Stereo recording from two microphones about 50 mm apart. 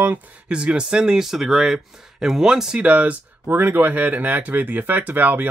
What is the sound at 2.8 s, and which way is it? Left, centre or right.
Speech, right.